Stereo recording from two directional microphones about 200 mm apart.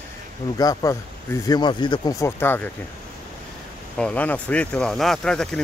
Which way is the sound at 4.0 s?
5° left (ahead or behind).